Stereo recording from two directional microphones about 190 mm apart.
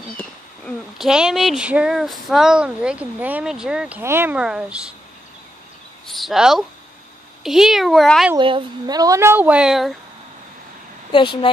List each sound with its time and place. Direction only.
0.2 s speech: centre (ahead or behind)
6.0 s speech: centre (ahead or behind)
8.4 s a woman's voice: 25° right (ahead or behind); by 9.9 s centre (ahead or behind)
11.1 s speech: 25° left (ahead or behind)